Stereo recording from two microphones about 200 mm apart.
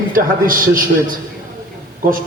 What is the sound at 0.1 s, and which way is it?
A man's voice, 45° right (ahead or behind).